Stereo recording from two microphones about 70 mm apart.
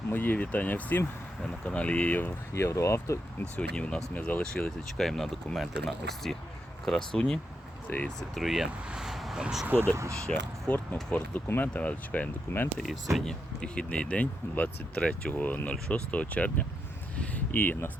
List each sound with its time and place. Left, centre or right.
0.1 s speech: left
2.5 s speech: left
3.5 s speech: centre
7.9 s speech: left
8.4 s speech: centre
9.6 s speech: right
9.9 s speech: right
10.7 s speech: centre
13.1 s speech: centre; by 17.9 s left